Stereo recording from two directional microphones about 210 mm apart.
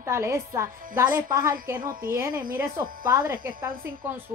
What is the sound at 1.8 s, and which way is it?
Speech, 40° right (ahead or behind).